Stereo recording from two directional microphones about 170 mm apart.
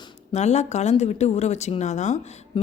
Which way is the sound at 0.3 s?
40° left (ahead or behind).